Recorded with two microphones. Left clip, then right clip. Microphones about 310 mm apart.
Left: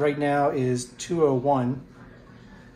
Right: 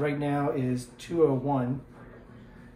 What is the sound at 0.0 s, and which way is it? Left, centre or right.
Speech, left.